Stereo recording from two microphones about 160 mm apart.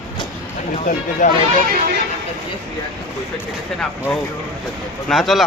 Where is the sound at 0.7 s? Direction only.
50° left (ahead or behind).